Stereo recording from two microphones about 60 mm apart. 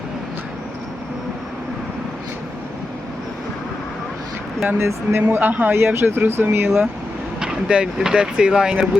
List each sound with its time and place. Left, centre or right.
4.8 s speech: right
5.2 s speech: right
5.7 s speech: right
7.4 s speech: centre